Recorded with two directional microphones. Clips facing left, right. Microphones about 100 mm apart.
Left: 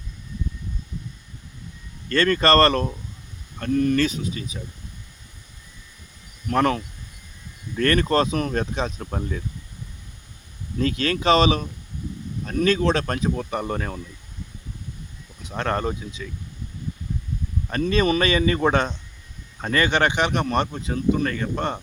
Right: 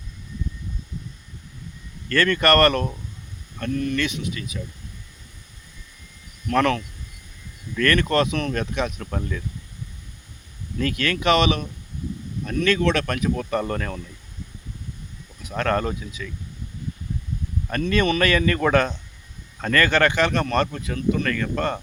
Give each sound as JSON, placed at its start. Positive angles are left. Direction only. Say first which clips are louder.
{"t": 2.0, "sound": "speech", "louder": "even", "side_deg": 30}
{"t": 6.5, "sound": "speech", "louder": "even", "side_deg": 30}
{"t": 10.8, "sound": "speech", "louder": "left 1 dB", "side_deg": 30}
{"t": 13.5, "sound": "speech", "louder": "right 2 dB", "side_deg": 15}
{"t": 13.7, "sound": "speech", "louder": "even", "side_deg": 25}
{"t": 15.4, "sound": "speech", "louder": "right 2 dB", "side_deg": 25}
{"t": 17.9, "sound": "speech", "louder": "even", "side_deg": 30}